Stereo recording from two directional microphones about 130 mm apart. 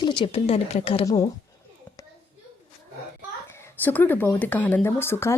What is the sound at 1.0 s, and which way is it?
Speech, 30° left (ahead or behind).